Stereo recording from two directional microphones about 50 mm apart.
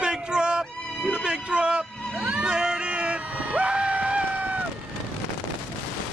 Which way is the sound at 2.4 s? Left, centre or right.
Centre.